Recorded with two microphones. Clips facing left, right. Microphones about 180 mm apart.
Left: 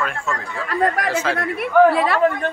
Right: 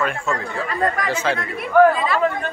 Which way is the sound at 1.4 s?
60° left (ahead or behind).